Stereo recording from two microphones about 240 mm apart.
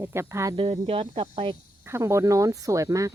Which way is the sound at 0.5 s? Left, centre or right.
Right.